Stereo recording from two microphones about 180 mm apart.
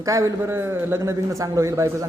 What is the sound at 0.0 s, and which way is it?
A man's voice, 20° right (ahead or behind).